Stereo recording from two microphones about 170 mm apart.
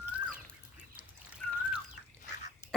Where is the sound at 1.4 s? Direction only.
5° left (ahead or behind).